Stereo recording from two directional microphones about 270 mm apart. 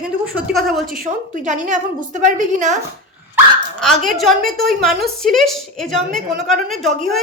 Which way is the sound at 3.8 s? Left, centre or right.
Centre.